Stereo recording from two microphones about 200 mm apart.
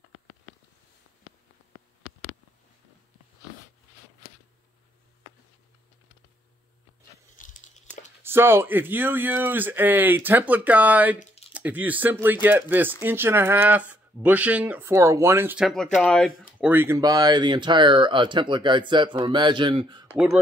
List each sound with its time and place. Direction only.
7.3 s a sound: 40° left (ahead or behind)
8.2 s speech: 10° right (ahead or behind)
16.7 s speech: 15° right (ahead or behind)